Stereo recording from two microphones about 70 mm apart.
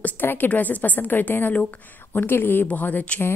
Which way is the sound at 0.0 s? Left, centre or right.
Left.